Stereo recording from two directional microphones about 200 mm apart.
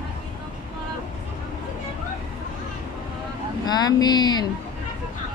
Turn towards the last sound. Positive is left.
turn(degrees=20)  # may be behind; listen again after turning